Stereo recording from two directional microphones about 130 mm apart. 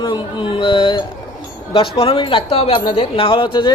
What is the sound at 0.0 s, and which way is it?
A man's voice, 35° left (ahead or behind).